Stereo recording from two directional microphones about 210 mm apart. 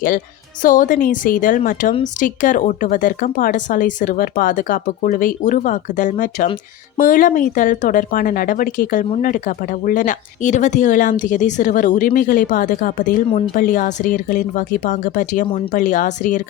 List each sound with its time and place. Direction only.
0.6 s speech: 40° left (ahead or behind)